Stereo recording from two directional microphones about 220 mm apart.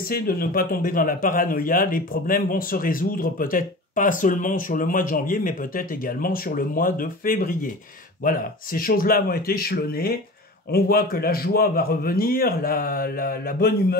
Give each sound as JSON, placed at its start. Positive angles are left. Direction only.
{"t": 0.1, "sound": "a man's voice", "side_deg": 40}